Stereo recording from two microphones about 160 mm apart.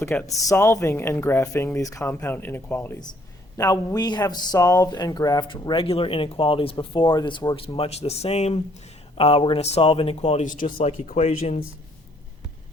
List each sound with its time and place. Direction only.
0.0 s speech: 10° left (ahead or behind)
0.3 s speech: 20° left (ahead or behind); by 10.7 s 55° left (ahead or behind)
10.8 s speech: 45° left (ahead or behind)